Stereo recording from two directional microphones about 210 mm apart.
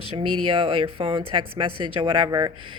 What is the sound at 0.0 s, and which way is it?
Speech, 25° right (ahead or behind).